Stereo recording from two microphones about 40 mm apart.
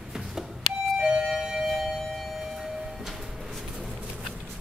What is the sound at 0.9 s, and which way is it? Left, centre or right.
Music, right.